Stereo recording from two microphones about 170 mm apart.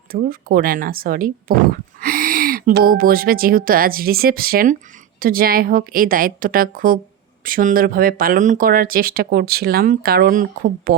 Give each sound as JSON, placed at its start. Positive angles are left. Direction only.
{"t": 0.1, "sound": "speech", "side_deg": -60}